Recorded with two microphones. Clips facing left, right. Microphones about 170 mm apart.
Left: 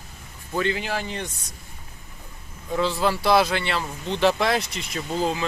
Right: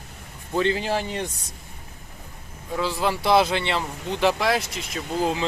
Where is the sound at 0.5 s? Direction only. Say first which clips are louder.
Right 3 dB; 30° right (ahead or behind).